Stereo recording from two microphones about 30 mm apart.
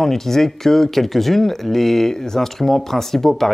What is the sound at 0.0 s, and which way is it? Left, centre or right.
Speech, centre.